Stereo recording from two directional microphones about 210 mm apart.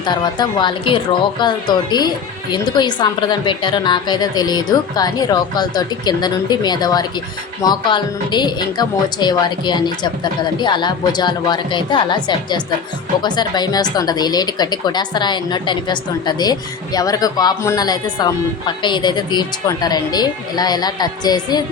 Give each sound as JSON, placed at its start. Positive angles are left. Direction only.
{"t": 0.0, "sound": "speech", "side_deg": 20}